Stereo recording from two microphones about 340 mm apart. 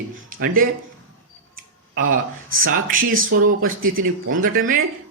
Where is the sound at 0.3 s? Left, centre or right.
Right.